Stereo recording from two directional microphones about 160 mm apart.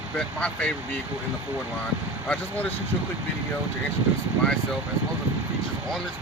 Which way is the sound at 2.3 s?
10° left (ahead or behind).